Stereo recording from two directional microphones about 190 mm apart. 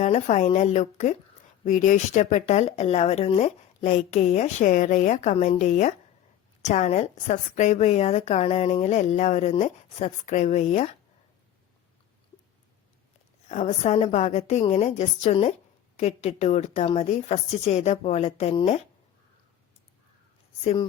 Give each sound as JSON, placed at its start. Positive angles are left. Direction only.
{"t": 0.0, "sound": "a woman's voice", "side_deg": 40}
{"t": 13.5, "sound": "a woman's voice", "side_deg": 35}